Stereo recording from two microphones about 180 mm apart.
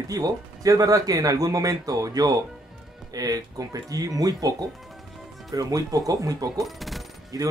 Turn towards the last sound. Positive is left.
turn(degrees=-20)  # may be behind; listen again after turning